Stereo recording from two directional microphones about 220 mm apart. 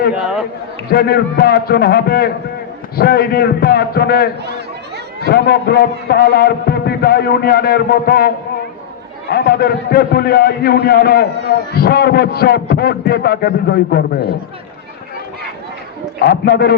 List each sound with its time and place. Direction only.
0.1 s a sound: 5° right (ahead or behind)
0.9 s a man's voice: 45° left (ahead or behind)
9.3 s a man's voice: 45° left (ahead or behind)
11.3 s a man's voice: 50° right (ahead or behind)
11.7 s a man's voice: 45° left (ahead or behind)
16.2 s a man's voice: 45° left (ahead or behind)